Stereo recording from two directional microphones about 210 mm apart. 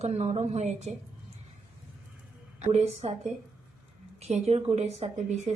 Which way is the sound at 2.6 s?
30° right (ahead or behind).